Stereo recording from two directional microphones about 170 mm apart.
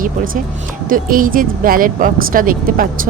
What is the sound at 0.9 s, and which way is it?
Speech, 55° right (ahead or behind).